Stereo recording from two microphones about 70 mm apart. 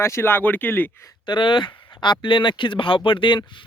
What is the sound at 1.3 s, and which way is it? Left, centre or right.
Speech, left.